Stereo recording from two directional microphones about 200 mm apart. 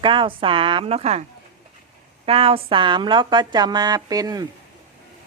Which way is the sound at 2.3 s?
30° right (ahead or behind).